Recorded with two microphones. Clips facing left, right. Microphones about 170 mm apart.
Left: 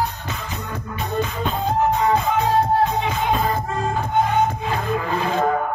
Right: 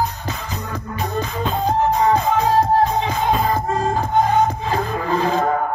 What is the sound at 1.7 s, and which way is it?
Music, 35° right (ahead or behind).